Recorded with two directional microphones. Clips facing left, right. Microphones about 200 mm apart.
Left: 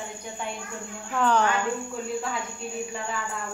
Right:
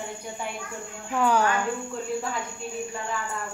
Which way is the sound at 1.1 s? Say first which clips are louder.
Even; 10° right (ahead or behind).